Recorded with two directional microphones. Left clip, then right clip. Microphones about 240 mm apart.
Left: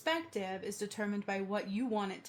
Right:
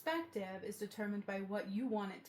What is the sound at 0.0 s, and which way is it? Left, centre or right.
Speech, left.